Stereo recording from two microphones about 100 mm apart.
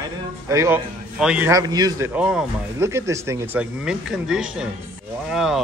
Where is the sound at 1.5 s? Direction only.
40° right (ahead or behind).